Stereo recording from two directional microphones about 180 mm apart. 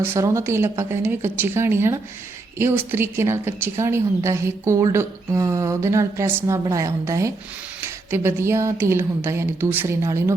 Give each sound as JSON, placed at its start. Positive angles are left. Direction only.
{"t": 0.0, "sound": "a woman's voice", "side_deg": -15}